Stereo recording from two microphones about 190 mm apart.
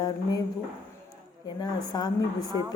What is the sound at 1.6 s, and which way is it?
Speech, 20° left (ahead or behind).